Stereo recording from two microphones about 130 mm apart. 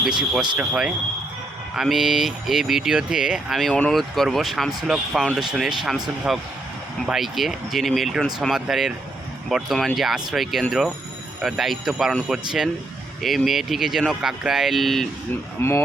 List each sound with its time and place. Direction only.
0.0 s speech: 5° right (ahead or behind)
15.6 s speech: 20° left (ahead or behind)